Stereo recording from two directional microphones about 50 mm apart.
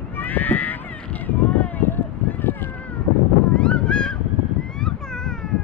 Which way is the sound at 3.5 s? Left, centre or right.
Left.